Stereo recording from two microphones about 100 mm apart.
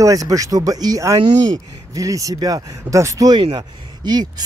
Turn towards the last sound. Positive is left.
turn(degrees=-40)  # may be behind; listen again after turning